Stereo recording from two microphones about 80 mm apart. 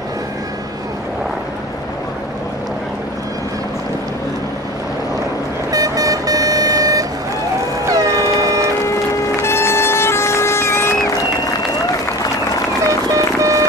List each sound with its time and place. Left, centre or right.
5.7 s vehicle: right
7.8 s air horn: right
9.4 s music: left
13.1 s music: right